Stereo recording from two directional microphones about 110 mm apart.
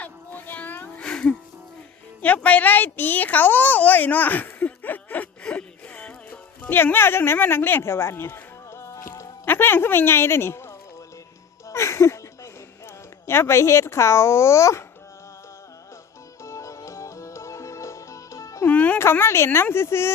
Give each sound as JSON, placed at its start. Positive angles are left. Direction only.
{"t": 0.0, "sound": "music", "side_deg": 15}
{"t": 2.2, "sound": "a sound", "side_deg": 15}
{"t": 9.5, "sound": "a woman's voice", "side_deg": 20}
{"t": 11.7, "sound": "music", "side_deg": 25}
{"t": 13.2, "sound": "speech", "side_deg": 25}
{"t": 16.4, "sound": "music", "side_deg": 25}
{"t": 18.7, "sound": "music", "side_deg": 10}
{"t": 19.0, "sound": "speech", "side_deg": 20}